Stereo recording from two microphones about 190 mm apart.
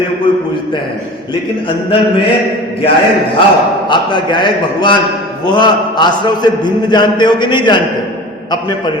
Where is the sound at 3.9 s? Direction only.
25° left (ahead or behind).